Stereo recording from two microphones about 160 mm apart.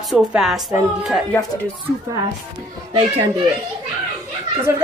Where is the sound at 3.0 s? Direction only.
35° right (ahead or behind).